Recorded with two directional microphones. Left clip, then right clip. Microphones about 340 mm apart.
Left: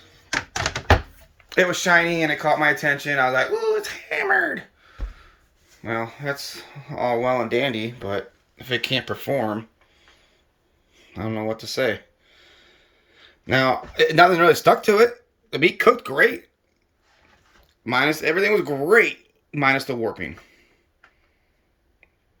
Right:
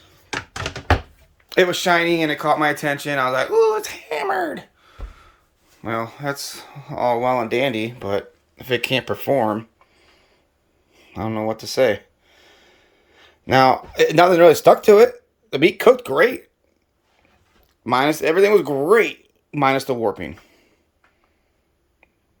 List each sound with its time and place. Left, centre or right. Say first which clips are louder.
1.5 s speech: right 2 dB; centre
17.8 s speech: right 3 dB; centre